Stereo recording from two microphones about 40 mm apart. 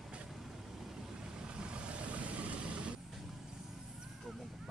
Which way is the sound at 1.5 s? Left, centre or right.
Right.